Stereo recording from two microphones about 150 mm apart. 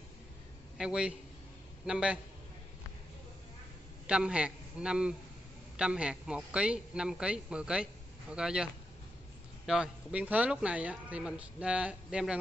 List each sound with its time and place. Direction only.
0.7 s a man's voice: 5° right (ahead or behind)
4.1 s a man's voice: 5° right (ahead or behind)
9.7 s a man's voice: 5° right (ahead or behind)